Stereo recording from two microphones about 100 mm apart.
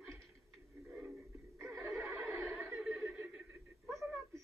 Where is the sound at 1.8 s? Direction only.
30° right (ahead or behind).